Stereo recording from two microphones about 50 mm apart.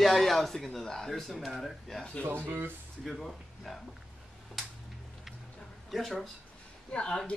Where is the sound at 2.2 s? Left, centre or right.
Right.